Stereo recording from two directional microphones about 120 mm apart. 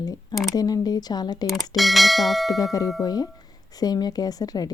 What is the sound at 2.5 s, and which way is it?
Speech, 30° left (ahead or behind).